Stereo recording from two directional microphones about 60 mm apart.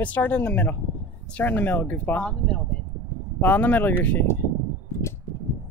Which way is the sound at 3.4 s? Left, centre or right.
Left.